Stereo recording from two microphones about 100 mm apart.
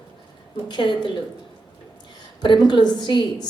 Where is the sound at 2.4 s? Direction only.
50° left (ahead or behind).